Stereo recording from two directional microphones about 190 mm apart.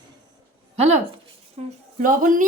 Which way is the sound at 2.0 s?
45° right (ahead or behind).